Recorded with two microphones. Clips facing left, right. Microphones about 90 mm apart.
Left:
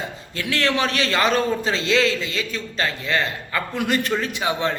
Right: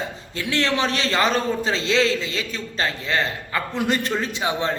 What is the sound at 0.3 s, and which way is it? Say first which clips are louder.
A man's voice: even; 25° right (ahead or behind).